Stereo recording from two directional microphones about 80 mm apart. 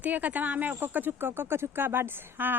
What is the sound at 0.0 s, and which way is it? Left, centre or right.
A woman's voice, centre.